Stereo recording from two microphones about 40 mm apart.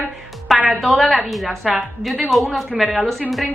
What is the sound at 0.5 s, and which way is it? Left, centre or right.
A woman's voice, centre.